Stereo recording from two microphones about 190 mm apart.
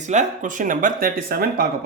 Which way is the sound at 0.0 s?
40° right (ahead or behind).